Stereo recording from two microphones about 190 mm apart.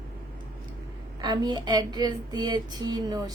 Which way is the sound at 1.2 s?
20° right (ahead or behind).